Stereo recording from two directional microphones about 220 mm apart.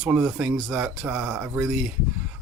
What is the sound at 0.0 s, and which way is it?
Speech, 10° right (ahead or behind).